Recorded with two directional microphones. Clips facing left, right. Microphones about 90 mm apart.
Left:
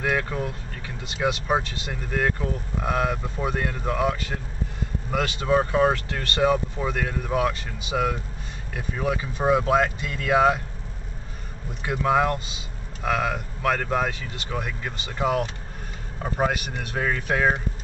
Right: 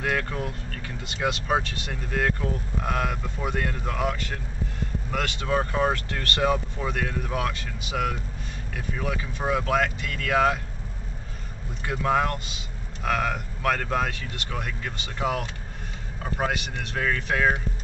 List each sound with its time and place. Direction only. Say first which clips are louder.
0.0 s vehicle: left 2 dB; 10° left (ahead or behind)
1.2 s speech: left 2 dB; 5° left (ahead or behind)
11.8 s speech: left 2 dB; 10° left (ahead or behind)
16.4 s speech: left 2 dB; 5° left (ahead or behind)